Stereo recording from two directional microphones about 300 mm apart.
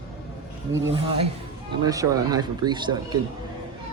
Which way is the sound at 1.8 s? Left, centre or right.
Centre.